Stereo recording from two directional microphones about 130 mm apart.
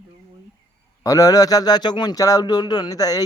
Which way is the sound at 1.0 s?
25° left (ahead or behind).